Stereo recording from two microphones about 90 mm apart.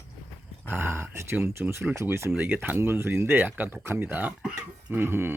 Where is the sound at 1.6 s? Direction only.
15° right (ahead or behind).